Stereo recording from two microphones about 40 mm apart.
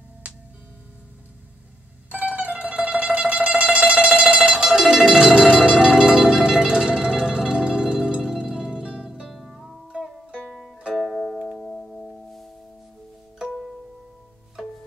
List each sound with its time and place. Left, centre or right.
2.0 s mandolin: right
4.9 s music: right
9.3 s music: centre
10.9 s music: centre
11.5 s singing bowl: centre